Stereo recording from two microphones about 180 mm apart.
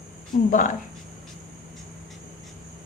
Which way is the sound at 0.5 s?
45° left (ahead or behind).